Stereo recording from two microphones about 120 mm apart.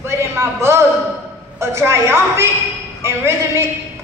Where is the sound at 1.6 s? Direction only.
20° right (ahead or behind).